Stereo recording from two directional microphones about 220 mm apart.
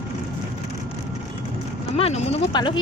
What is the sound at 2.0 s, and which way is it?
Speech, 30° left (ahead or behind).